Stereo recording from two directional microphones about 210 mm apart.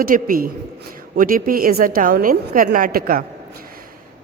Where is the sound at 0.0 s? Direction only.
40° right (ahead or behind).